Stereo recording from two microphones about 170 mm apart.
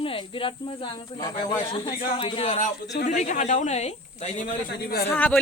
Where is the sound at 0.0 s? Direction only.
30° left (ahead or behind).